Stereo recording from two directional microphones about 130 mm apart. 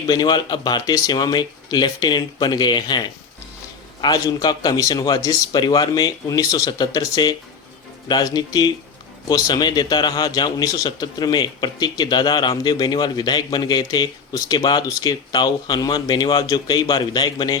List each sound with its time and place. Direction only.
0.1 s a man's voice: 35° left (ahead or behind)